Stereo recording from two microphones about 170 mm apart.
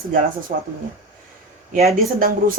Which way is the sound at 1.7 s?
60° right (ahead or behind).